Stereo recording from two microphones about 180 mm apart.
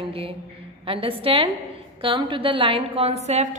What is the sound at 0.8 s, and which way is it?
A woman's voice, 30° right (ahead or behind).